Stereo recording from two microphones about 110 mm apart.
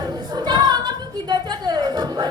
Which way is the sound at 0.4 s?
40° right (ahead or behind).